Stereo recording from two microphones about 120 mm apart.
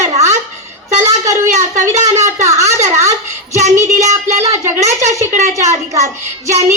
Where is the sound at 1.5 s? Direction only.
90° right.